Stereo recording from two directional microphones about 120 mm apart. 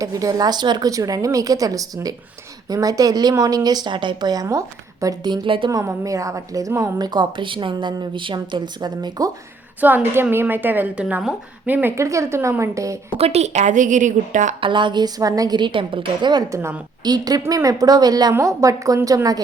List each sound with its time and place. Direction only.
0.0 s a woman's voice: 30° right (ahead or behind)
5.7 s a woman's voice: 25° right (ahead or behind)
9.8 s a woman's voice: 15° right (ahead or behind)
13.1 s a woman's voice: 60° right (ahead or behind); by 14.5 s 90° right
14.6 s a woman's voice: 40° right (ahead or behind)
16.5 s a woman's voice: 20° right (ahead or behind)
17.0 s a woman's voice: 35° right (ahead or behind)